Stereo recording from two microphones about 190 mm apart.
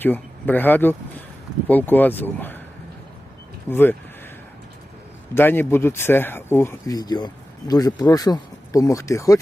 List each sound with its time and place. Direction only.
0.0 s speech: 10° left (ahead or behind)
3.7 s speech: 10° left (ahead or behind)
5.3 s speech: 10° left (ahead or behind)